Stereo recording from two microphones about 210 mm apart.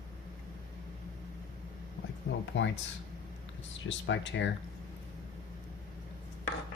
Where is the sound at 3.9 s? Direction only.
60° left (ahead or behind).